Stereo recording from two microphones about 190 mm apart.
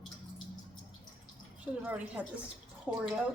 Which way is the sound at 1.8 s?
5° right (ahead or behind).